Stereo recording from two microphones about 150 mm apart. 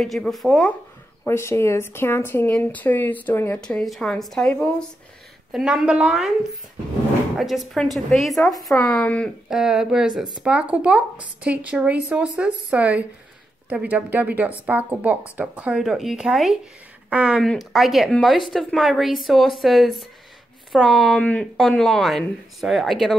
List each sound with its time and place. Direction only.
0.0 s speech: centre (ahead or behind)
1.2 s speech: 15° left (ahead or behind)
5.5 s speech: 5° right (ahead or behind)
7.3 s speech: centre (ahead or behind)
9.5 s a woman's voice: 5° right (ahead or behind)